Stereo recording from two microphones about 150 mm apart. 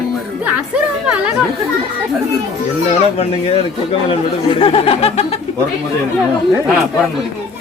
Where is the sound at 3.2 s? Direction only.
40° left (ahead or behind).